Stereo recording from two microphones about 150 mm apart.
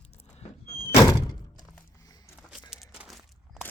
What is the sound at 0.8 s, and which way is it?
Door, 20° left (ahead or behind).